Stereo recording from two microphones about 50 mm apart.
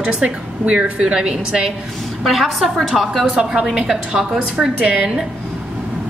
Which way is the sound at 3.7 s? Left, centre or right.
Centre.